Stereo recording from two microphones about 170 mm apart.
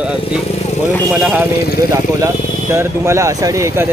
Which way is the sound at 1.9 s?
15° right (ahead or behind).